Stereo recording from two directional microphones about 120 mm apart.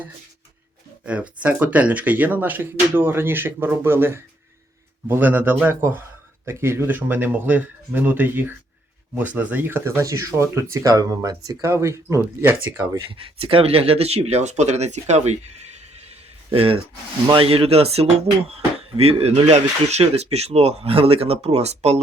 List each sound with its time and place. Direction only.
1.0 s speech: 10° right (ahead or behind)
13.1 s speech: 45° right (ahead or behind); by 15.8 s 65° right (ahead or behind)
16.5 s speech: 50° right (ahead or behind)